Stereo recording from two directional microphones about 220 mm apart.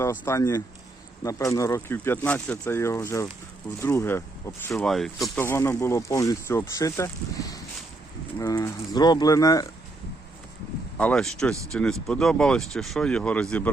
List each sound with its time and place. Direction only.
0.0 s speech: 10° left (ahead or behind)
10.9 s speech: 5° left (ahead or behind)